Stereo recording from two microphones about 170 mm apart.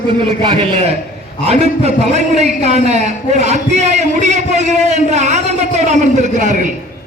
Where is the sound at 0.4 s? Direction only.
30° right (ahead or behind).